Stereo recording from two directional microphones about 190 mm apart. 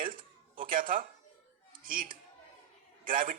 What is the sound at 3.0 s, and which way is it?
Speech, 45° right (ahead or behind).